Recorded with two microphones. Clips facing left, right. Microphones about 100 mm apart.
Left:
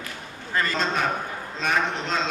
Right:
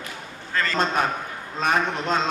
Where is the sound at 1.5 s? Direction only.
45° right (ahead or behind).